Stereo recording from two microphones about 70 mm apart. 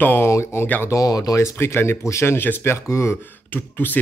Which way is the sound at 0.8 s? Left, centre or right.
Left.